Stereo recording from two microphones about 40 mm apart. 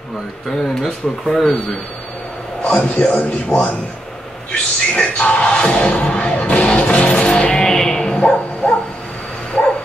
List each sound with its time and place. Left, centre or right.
0.5 s speech: centre
2.6 s speech: left
6.8 s music: left
7.2 s music: left
8.2 s bow-wow: left